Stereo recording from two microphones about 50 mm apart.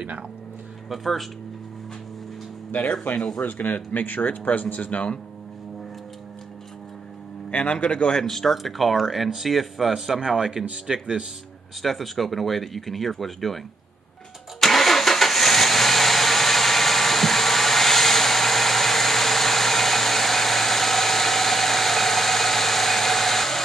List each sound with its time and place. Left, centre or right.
0.8 s speech: centre
2.8 s speech: left
3.4 s speech: left
7.5 s speech: left
8.2 s speech: centre
11.8 s speech: centre
14.6 s vehicle: centre